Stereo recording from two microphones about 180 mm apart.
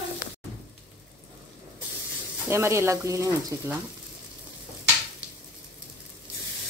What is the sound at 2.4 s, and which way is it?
Speech, 15° right (ahead or behind).